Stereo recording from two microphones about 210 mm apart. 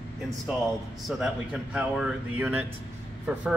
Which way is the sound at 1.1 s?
5° right (ahead or behind).